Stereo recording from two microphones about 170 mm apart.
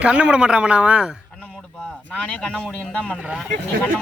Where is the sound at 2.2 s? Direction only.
5° left (ahead or behind).